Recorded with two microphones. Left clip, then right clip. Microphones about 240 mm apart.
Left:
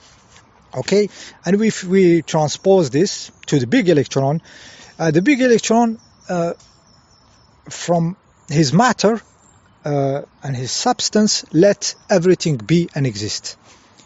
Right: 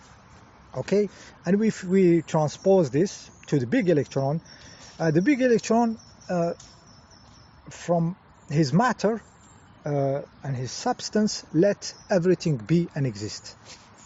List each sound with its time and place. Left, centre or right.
0.7 s speech: left
7.7 s speech: left